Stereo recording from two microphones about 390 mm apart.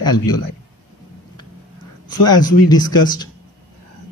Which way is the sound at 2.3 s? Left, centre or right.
Centre.